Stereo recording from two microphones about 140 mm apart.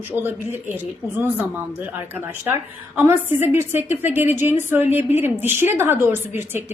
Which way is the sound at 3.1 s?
15° right (ahead or behind).